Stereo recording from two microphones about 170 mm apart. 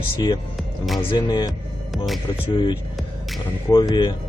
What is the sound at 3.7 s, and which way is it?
Speech, 20° left (ahead or behind).